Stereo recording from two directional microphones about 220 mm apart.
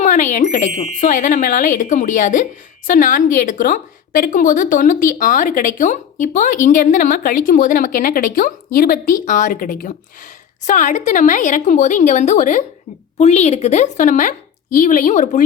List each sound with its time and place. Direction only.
0.0 s speech: 35° left (ahead or behind)